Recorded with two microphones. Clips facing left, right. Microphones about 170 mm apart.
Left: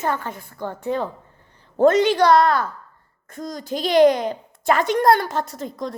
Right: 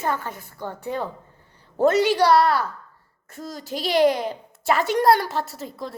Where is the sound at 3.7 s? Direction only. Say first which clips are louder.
Left 4 dB; 40° left (ahead or behind).